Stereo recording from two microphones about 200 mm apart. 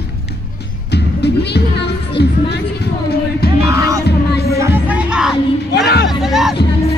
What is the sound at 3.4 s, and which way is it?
Music, 50° left (ahead or behind).